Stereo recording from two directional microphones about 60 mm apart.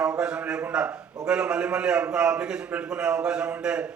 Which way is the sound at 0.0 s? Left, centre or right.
Centre.